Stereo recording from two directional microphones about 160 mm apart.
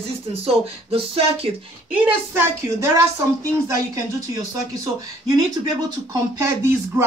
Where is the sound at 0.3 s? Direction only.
35° right (ahead or behind).